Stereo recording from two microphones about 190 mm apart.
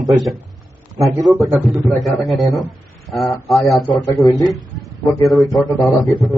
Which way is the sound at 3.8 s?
25° left (ahead or behind).